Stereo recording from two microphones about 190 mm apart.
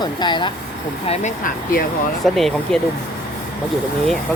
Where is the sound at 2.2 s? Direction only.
Centre (ahead or behind).